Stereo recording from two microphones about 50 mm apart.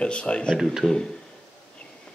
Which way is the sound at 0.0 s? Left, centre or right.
Left.